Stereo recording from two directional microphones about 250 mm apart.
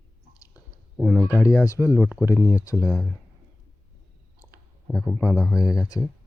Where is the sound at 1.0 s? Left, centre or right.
Centre.